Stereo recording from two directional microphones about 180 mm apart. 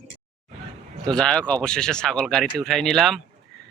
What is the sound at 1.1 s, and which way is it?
Speech, 5° left (ahead or behind).